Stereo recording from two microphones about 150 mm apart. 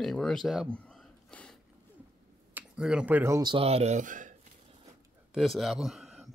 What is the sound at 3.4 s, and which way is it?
Speech, 30° right (ahead or behind).